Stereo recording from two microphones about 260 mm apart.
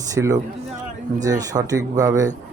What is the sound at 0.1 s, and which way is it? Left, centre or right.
Speech, centre.